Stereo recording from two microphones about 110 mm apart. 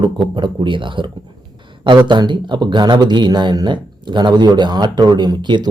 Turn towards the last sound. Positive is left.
turn(degrees=-45)  # may be behind; listen again after turning